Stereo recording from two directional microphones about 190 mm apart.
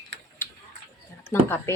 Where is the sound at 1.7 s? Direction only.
15° left (ahead or behind).